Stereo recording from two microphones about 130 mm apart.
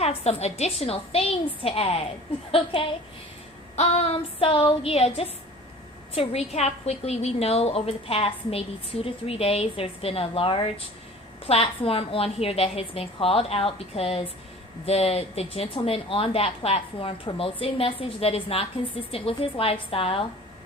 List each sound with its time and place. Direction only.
0.0 s a woman's voice: 50° left (ahead or behind)
3.8 s a woman's voice: 55° left (ahead or behind)